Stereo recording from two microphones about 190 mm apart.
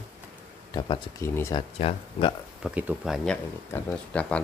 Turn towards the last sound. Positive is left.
turn(degrees=10)  # may be behind; listen again after turning